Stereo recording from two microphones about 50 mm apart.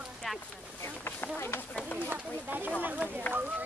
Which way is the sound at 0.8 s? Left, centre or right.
Left.